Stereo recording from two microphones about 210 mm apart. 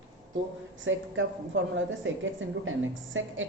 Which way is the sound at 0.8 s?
65° right (ahead or behind).